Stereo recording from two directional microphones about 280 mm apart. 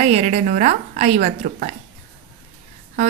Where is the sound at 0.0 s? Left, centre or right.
Right.